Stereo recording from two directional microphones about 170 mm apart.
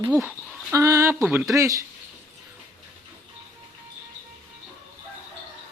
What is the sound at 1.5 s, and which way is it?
Speech, 20° right (ahead or behind).